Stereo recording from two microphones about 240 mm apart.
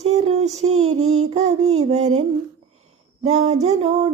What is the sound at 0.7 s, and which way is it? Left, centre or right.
Child singing, right.